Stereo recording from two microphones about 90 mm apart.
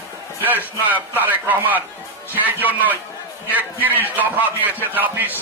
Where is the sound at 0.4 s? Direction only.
20° right (ahead or behind).